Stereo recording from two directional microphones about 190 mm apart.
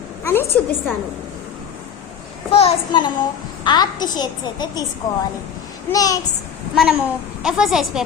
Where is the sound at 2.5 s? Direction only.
30° left (ahead or behind).